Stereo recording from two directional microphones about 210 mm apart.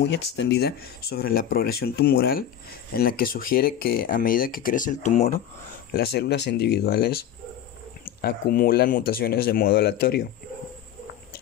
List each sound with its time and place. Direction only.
0.0 s speech: 55° left (ahead or behind); by 5.4 s 35° left (ahead or behind)
5.9 s speech: 50° left (ahead or behind)